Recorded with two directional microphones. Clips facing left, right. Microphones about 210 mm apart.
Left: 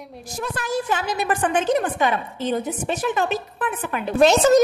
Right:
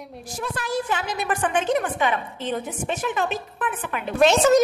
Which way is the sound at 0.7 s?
40° left (ahead or behind).